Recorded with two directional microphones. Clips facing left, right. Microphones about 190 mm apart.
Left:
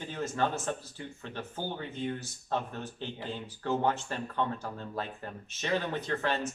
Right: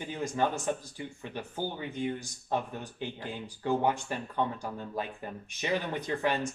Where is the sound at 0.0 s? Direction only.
15° right (ahead or behind).